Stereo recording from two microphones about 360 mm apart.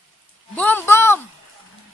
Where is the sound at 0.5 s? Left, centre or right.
Centre.